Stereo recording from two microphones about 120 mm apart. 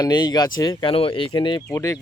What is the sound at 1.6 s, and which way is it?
Speech, 25° left (ahead or behind).